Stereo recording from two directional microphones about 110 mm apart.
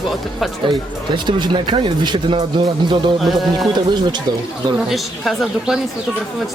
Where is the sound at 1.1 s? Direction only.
45° right (ahead or behind).